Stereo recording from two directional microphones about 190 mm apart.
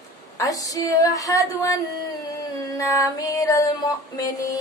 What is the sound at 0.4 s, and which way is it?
Speech, 20° left (ahead or behind).